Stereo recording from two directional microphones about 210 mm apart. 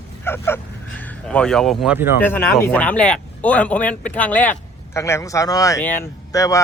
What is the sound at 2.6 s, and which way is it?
Speech, 10° left (ahead or behind).